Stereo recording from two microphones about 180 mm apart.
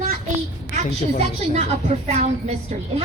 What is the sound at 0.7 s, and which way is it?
A woman's voice, 35° right (ahead or behind).